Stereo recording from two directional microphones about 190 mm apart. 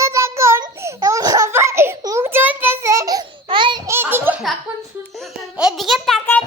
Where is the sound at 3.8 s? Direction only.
10° right (ahead or behind); by 6.4 s 5° left (ahead or behind).